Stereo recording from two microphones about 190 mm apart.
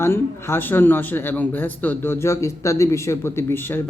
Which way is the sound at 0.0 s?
15° left (ahead or behind).